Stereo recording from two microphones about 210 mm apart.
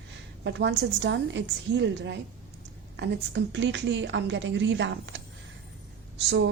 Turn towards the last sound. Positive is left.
turn(degrees=-55)  # may be behind; listen again after turning